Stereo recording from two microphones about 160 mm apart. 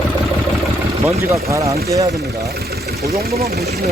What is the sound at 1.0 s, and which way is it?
Speech, 20° right (ahead or behind).